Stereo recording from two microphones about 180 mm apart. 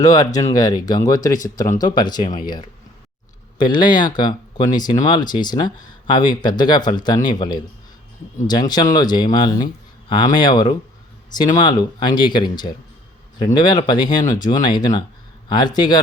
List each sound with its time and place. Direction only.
0.0 s speech: 20° left (ahead or behind)
3.6 s speech: 25° left (ahead or behind)